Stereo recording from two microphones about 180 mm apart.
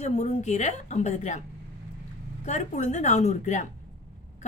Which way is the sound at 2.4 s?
40° left (ahead or behind).